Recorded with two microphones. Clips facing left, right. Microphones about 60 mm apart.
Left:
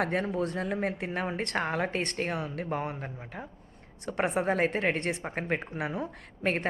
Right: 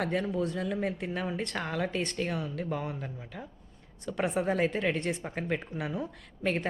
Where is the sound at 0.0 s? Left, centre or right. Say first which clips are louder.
Left 1 dB; left.